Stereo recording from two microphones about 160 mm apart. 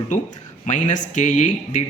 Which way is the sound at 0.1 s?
50° left (ahead or behind).